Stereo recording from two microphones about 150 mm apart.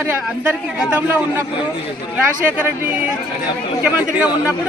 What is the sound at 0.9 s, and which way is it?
Speech, 10° right (ahead or behind).